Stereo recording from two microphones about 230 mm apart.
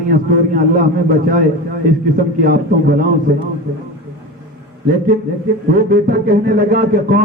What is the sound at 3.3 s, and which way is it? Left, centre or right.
Speech, right.